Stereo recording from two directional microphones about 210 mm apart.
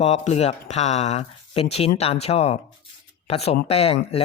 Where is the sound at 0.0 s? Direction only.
30° left (ahead or behind).